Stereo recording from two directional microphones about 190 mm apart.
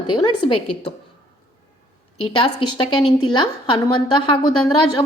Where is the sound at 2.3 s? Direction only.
30° left (ahead or behind).